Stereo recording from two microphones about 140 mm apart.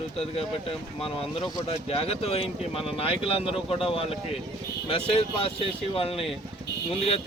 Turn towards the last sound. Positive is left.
turn(degrees=40)  # may be behind; listen again after turning